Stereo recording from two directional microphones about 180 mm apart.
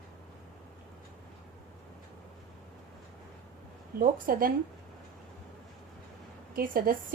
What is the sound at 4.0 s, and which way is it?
Speech, 50° right (ahead or behind).